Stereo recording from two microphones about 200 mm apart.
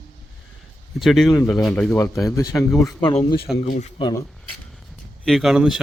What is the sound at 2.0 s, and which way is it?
Speech, 15° left (ahead or behind).